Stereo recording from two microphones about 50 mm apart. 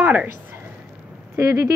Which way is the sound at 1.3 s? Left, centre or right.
Right.